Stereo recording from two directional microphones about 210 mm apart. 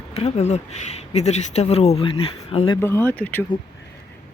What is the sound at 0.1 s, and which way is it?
Speech, 30° left (ahead or behind).